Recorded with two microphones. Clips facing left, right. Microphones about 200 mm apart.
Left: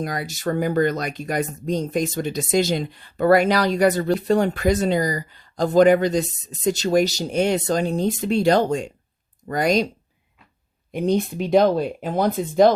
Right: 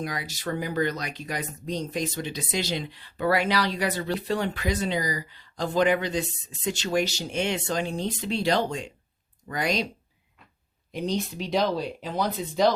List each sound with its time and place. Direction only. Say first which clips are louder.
0.0 s speech: left 6 dB; 45° left (ahead or behind)
10.9 s speech: left 8 dB; 55° left (ahead or behind)